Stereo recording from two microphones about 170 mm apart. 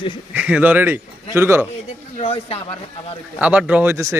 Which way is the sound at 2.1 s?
35° left (ahead or behind).